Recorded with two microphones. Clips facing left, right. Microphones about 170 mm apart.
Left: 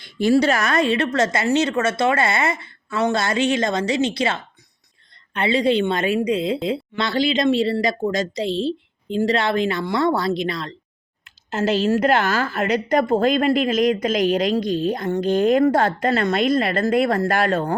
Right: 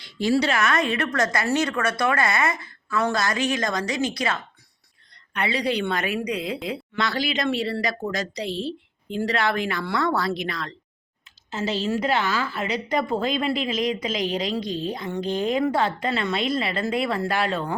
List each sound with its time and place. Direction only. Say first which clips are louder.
0.0 s a woman's voice: left 5 dB; 55° left (ahead or behind); by 10.8 s 25° left (ahead or behind)
11.9 s a woman's voice: left 3 dB; 50° left (ahead or behind)